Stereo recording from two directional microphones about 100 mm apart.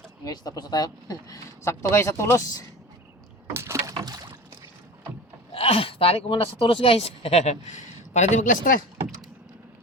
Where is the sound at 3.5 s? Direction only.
30° right (ahead or behind).